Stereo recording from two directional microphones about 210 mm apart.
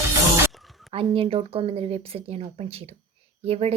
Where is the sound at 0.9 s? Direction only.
25° right (ahead or behind).